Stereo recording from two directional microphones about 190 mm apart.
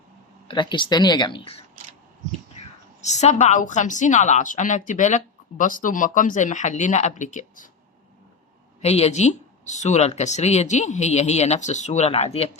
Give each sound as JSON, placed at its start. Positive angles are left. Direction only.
{"t": 0.4, "sound": "speech", "side_deg": 25}
{"t": 2.6, "sound": "whispering", "side_deg": 35}
{"t": 3.0, "sound": "a woman's voice", "side_deg": 35}
{"t": 8.8, "sound": "a woman's voice", "side_deg": 35}